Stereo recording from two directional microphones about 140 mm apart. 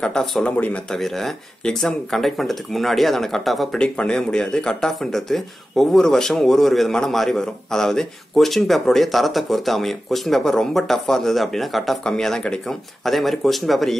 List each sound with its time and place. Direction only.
0.0 s speech: 5° left (ahead or behind)